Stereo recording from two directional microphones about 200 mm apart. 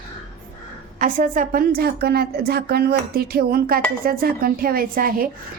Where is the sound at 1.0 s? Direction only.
40° right (ahead or behind).